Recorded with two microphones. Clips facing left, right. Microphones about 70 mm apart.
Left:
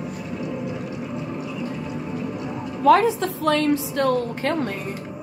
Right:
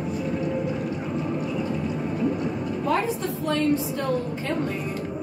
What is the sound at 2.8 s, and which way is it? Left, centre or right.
A woman's voice, left.